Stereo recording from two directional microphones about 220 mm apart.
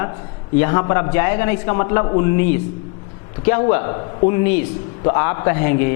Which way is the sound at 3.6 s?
20° left (ahead or behind).